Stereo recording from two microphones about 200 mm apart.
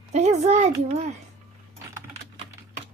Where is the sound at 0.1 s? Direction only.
35° right (ahead or behind).